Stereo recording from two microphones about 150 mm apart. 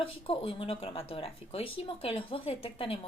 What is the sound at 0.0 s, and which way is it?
A woman's voice, 40° left (ahead or behind).